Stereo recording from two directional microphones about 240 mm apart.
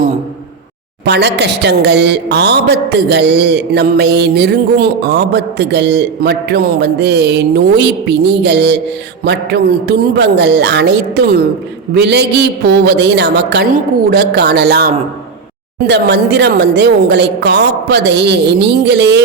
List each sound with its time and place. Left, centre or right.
1.0 s speech: right